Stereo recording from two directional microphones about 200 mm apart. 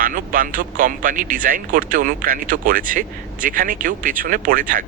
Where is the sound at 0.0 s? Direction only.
45° right (ahead or behind).